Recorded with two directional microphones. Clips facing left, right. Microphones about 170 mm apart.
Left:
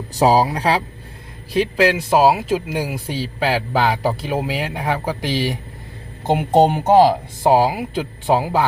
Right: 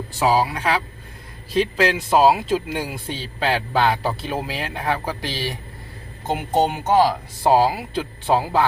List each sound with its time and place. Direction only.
0.1 s a woman's voice: 40° left (ahead or behind)
1.5 s speech: 10° left (ahead or behind)
6.2 s a woman's voice: 30° left (ahead or behind)
7.4 s speech: 15° left (ahead or behind)